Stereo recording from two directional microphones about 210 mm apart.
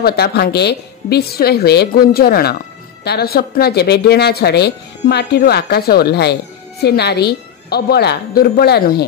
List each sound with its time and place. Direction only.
0.0 s speech: 50° left (ahead or behind)